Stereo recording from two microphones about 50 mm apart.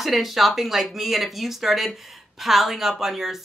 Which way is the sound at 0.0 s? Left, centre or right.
Centre.